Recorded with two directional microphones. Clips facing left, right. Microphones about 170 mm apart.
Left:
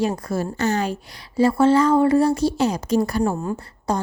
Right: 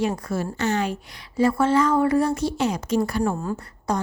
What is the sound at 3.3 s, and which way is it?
Speech, 15° left (ahead or behind).